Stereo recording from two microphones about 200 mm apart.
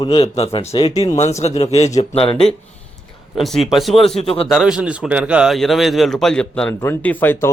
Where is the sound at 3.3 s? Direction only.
Centre (ahead or behind).